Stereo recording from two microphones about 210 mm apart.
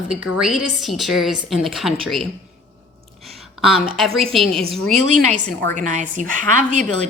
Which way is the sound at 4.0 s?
Centre (ahead or behind).